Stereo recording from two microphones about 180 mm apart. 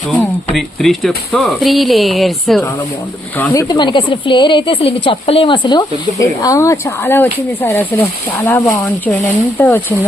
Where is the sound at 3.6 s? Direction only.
25° left (ahead or behind).